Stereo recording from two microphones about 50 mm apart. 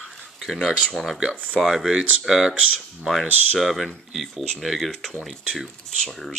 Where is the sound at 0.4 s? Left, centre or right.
Centre.